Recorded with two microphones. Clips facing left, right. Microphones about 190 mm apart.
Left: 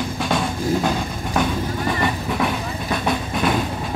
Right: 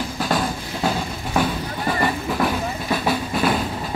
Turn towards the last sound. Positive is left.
turn(degrees=-5)  # may be behind; listen again after turning